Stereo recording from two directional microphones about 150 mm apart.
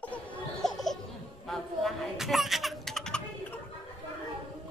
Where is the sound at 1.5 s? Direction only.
Centre (ahead or behind).